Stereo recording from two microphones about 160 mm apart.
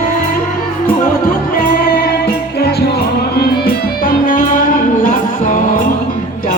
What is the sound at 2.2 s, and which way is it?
Music, 80° left.